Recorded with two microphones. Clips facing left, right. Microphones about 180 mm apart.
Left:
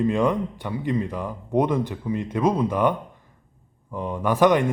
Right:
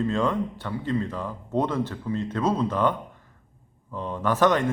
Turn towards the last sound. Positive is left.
turn(degrees=15)  # may be behind; listen again after turning